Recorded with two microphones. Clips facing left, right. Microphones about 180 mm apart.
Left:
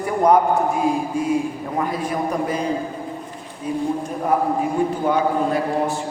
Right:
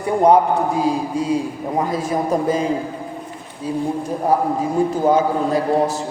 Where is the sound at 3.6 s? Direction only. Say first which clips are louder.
Right 1 dB; 30° right (ahead or behind).